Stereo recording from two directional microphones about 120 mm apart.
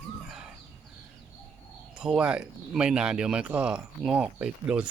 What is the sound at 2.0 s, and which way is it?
Speech, 5° right (ahead or behind).